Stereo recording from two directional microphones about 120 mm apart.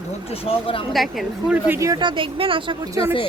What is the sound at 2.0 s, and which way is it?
Speech, 45° right (ahead or behind).